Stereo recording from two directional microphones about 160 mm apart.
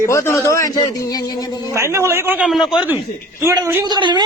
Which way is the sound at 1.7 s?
15° right (ahead or behind).